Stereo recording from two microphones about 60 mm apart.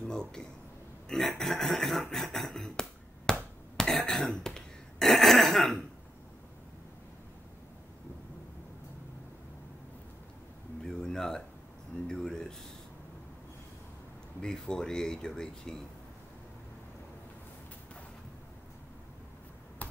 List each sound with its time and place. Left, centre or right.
0.0 s a sound: centre
1.0 s speech: centre
3.7 s cough: centre
11.0 s a sound: centre
14.4 s speech: centre
19.8 s finger snapping: left